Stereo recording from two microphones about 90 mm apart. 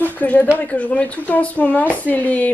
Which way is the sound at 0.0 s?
20° left (ahead or behind).